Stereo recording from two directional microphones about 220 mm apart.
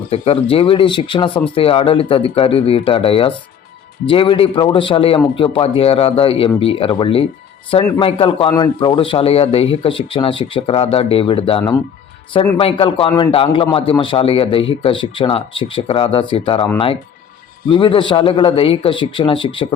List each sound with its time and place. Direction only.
0.1 s speech: 25° left (ahead or behind)